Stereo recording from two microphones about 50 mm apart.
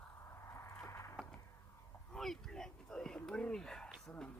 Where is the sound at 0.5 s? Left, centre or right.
Left.